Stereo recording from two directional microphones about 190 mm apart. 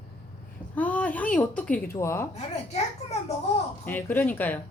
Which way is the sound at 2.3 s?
35° left (ahead or behind).